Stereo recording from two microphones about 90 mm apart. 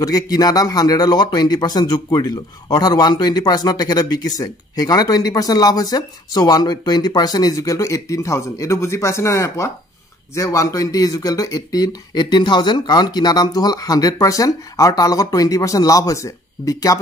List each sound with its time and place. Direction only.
0.0 s a man's voice: 45° left (ahead or behind)